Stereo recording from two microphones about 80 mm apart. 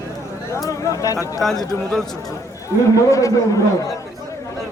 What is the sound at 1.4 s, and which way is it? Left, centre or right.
Speech, centre.